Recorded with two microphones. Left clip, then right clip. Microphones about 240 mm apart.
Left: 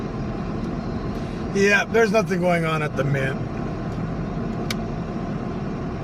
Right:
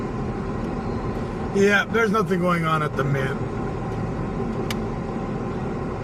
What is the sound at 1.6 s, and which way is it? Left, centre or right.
A man's voice, left.